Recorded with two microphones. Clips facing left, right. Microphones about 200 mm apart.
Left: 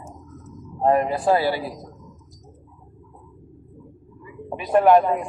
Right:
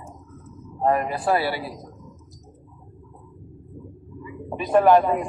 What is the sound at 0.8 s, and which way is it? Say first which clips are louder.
Speech: left 3 dB; 25° left (ahead or behind).